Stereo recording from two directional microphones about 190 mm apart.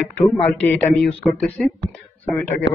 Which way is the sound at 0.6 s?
5° left (ahead or behind).